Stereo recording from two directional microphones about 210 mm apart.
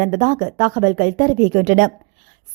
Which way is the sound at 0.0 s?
40° right (ahead or behind).